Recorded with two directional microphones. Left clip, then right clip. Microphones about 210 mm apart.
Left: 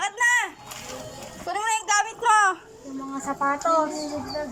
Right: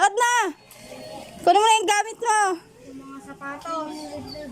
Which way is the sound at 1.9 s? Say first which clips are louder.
Left 2 dB; 30° right (ahead or behind).